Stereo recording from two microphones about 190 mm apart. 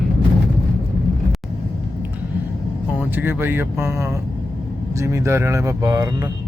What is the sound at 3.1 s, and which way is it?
Speech, 10° right (ahead or behind).